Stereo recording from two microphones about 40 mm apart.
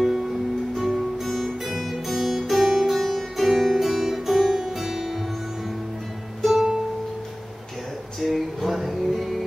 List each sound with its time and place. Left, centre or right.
0.7 s music: centre
6.4 s music: centre
8.2 s music: centre